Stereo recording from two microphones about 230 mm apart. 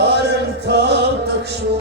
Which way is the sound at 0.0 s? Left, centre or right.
Right.